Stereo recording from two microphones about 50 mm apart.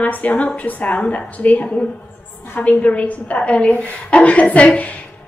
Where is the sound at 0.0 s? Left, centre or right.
Left.